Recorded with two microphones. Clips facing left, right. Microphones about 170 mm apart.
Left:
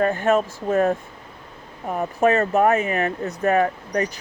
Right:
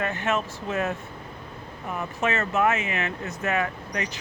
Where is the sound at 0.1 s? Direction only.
45° left (ahead or behind).